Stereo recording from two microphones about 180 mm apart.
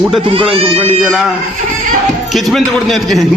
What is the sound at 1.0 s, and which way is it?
Speech, 5° right (ahead or behind).